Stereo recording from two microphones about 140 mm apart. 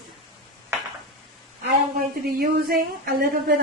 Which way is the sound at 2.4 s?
90° right.